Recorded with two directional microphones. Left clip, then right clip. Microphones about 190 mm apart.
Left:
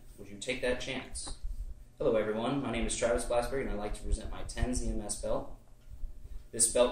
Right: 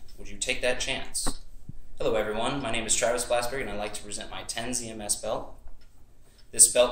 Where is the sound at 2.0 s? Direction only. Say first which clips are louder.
Right 3 dB; 15° left (ahead or behind).